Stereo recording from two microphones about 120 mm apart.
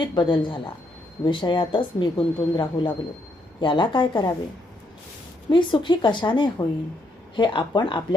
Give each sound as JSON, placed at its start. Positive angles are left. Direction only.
{"t": 0.0, "sound": "speech", "side_deg": 40}
{"t": 5.5, "sound": "speech", "side_deg": 40}